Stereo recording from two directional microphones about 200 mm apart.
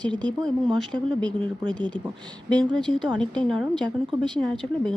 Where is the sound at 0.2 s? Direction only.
5° left (ahead or behind).